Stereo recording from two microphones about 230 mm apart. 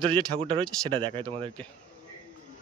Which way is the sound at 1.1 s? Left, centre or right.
Right.